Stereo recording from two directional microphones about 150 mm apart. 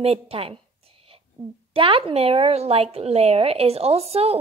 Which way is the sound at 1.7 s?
35° right (ahead or behind).